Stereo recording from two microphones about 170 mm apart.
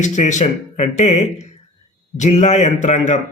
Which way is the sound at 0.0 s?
45° left (ahead or behind).